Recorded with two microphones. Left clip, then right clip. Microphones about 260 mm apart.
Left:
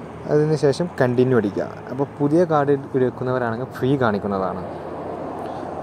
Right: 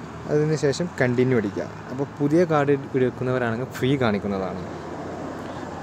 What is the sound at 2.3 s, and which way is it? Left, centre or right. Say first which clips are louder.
Speech: left 2 dB; centre.